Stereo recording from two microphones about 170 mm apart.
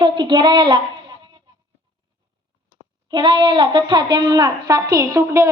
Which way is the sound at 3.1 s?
25° right (ahead or behind).